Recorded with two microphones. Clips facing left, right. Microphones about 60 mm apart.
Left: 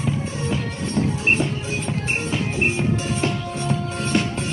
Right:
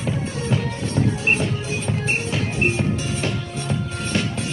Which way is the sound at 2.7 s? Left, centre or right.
Left.